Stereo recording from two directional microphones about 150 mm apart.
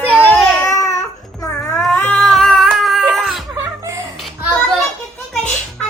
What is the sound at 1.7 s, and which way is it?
Cat, 10° left (ahead or behind).